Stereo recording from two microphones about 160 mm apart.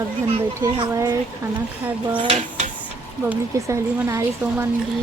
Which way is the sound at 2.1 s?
40° right (ahead or behind).